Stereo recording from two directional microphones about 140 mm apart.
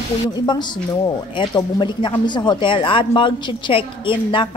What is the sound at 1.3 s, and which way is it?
Speech, 35° left (ahead or behind).